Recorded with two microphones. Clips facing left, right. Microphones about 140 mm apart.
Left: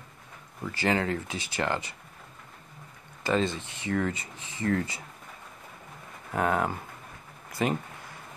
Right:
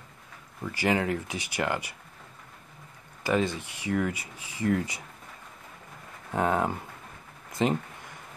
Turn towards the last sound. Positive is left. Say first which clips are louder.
# right 2 dB
turn(degrees=-20)  # may be behind; listen again after turning